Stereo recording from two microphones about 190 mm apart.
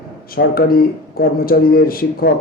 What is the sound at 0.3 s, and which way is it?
A man's voice, 50° left (ahead or behind).